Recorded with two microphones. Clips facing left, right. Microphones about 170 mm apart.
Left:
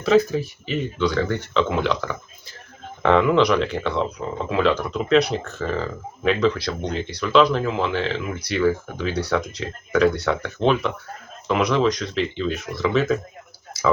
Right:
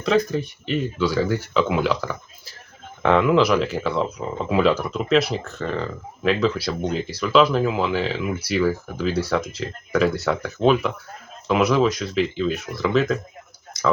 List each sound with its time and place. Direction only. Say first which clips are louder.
0.0 s speech: left 3 dB; 5° left (ahead or behind)